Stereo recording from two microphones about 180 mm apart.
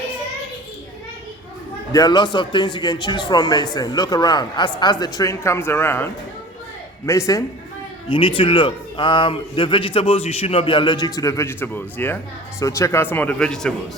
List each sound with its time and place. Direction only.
1.9 s a woman's voice: 20° left (ahead or behind)
8.1 s speech: 25° left (ahead or behind); by 13.7 s 5° left (ahead or behind)